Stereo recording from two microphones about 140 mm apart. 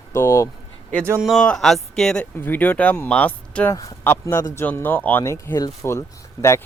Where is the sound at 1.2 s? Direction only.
Centre (ahead or behind).